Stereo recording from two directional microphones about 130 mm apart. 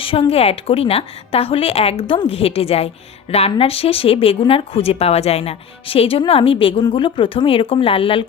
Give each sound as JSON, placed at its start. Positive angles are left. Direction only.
{"t": 0.0, "sound": "a woman's voice", "side_deg": 45}